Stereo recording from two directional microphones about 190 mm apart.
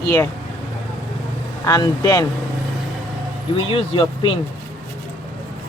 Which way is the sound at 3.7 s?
25° left (ahead or behind).